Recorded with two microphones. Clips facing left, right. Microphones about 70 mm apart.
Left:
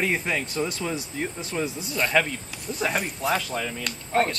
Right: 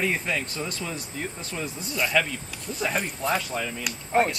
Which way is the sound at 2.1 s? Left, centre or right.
Centre.